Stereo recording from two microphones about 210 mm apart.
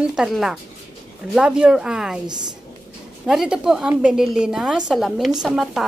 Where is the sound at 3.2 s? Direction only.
5° right (ahead or behind).